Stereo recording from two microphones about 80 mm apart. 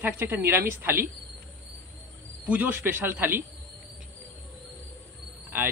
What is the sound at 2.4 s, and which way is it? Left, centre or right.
A man's voice, centre.